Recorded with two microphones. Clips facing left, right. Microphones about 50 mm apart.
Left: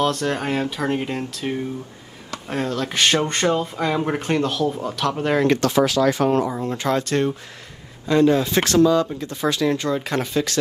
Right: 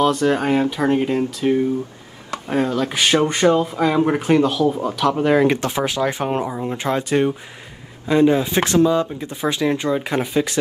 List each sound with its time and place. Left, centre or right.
0.0 s speech: centre
5.5 s speech: right